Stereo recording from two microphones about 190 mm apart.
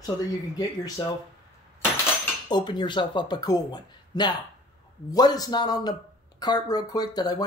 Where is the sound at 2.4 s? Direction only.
25° left (ahead or behind).